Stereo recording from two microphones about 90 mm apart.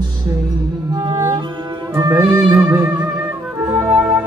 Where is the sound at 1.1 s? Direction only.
65° right (ahead or behind).